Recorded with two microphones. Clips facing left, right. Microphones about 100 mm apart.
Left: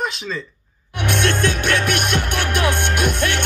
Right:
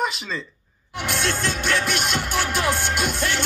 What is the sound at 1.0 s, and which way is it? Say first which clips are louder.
Music: left 5 dB; 60° left (ahead or behind).